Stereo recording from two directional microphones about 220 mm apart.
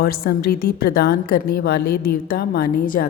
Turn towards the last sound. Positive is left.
turn(degrees=40)  # may be behind; listen again after turning